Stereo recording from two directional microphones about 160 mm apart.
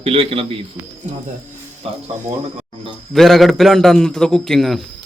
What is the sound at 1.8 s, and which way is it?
Speech, 40° right (ahead or behind).